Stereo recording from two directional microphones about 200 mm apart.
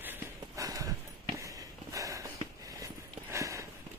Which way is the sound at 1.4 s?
15° right (ahead or behind).